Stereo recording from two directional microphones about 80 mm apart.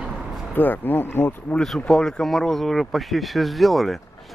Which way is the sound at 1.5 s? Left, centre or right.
Centre.